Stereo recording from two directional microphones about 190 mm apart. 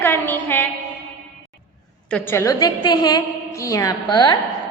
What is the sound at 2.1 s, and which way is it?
A woman's voice, 10° left (ahead or behind).